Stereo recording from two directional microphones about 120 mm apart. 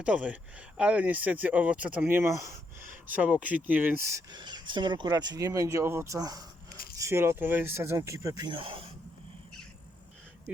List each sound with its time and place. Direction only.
0.0 s speech: 10° right (ahead or behind)
3.1 s speech: 10° right (ahead or behind)
4.3 s speech: 35° right (ahead or behind)
8.4 s speech: 45° right (ahead or behind)